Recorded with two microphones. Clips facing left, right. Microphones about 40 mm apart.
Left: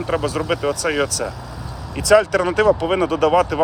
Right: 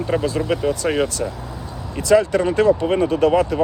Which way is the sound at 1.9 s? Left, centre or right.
Left.